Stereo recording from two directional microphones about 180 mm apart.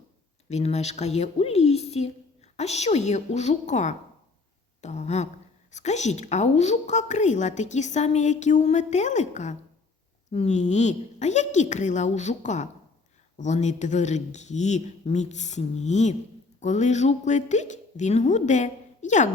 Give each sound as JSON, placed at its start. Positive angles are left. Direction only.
{"t": 0.4, "sound": "a woman's voice", "side_deg": 35}